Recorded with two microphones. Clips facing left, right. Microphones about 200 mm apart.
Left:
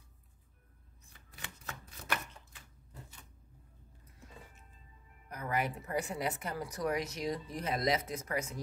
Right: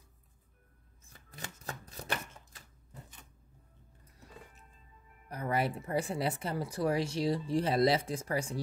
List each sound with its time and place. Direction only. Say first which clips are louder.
1.3 s shuffling cards: right 4 dB; 40° right (ahead or behind)
5.3 s speech: right 3 dB; 30° right (ahead or behind)